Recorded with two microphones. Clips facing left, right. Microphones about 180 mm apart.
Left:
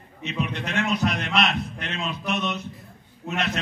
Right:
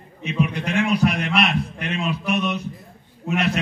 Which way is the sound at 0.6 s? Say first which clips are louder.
Right 4 dB; 10° right (ahead or behind).